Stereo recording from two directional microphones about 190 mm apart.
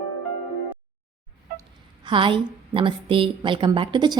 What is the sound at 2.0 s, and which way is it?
A woman's voice, 25° right (ahead or behind).